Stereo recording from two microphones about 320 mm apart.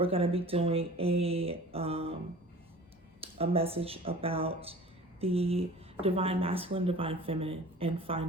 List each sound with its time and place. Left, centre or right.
0.0 s speech: centre
3.2 s speech: centre